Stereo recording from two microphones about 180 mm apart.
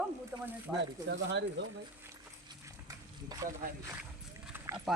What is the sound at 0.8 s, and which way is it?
Speech, 75° right (ahead or behind).